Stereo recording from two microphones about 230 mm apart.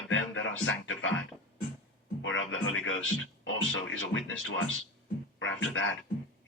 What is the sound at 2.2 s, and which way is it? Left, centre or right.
Speech, left.